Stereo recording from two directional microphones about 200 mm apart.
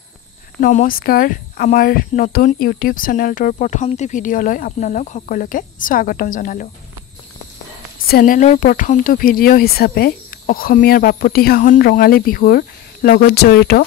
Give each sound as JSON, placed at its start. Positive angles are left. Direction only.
{"t": 0.6, "sound": "speech", "side_deg": 40}
{"t": 8.1, "sound": "speech", "side_deg": 40}